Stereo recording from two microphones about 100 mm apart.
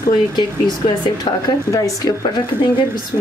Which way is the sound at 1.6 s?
35° left (ahead or behind).